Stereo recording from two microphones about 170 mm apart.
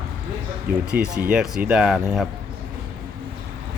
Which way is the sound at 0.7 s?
70° right (ahead or behind).